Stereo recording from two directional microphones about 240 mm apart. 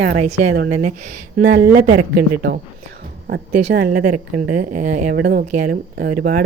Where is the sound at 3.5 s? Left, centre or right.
Right.